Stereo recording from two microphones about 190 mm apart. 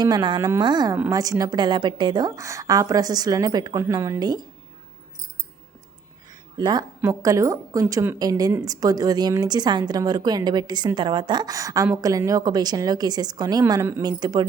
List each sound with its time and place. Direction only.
0.0 s a woman's voice: 20° right (ahead or behind)
6.6 s a woman's voice: 20° right (ahead or behind)